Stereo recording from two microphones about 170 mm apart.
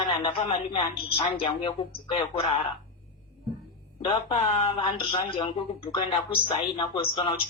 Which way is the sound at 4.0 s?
30° left (ahead or behind).